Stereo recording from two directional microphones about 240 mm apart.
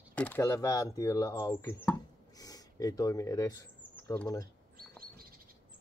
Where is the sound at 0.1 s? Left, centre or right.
Centre.